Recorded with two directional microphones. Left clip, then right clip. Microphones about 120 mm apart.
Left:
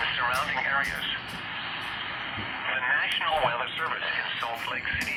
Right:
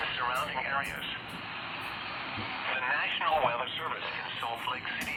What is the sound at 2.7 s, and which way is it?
Radio, 35° right (ahead or behind).